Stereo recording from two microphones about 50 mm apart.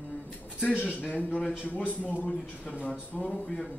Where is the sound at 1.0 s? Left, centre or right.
Left.